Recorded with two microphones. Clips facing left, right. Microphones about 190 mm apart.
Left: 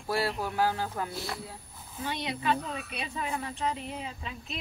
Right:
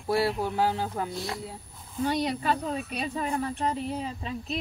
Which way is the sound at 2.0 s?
40° right (ahead or behind).